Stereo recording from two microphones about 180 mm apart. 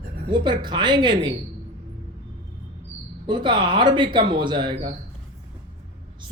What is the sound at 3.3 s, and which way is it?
Speech, 25° right (ahead or behind).